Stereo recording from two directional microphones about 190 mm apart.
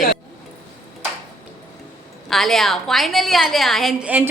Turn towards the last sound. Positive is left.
turn(degrees=-5)  # may be behind; listen again after turning